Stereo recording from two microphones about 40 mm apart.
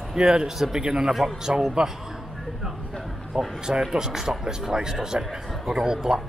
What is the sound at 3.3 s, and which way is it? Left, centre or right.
A man's voice, centre.